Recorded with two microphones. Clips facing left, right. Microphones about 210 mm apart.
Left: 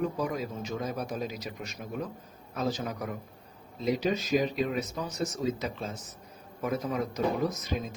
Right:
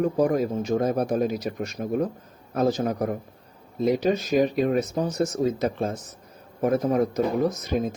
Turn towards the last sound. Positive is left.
turn(degrees=-55)  # may be behind; listen again after turning